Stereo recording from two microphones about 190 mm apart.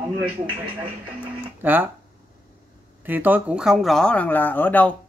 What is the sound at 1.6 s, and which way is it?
Speech, 10° right (ahead or behind).